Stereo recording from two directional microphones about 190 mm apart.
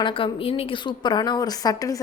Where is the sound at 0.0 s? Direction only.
25° left (ahead or behind).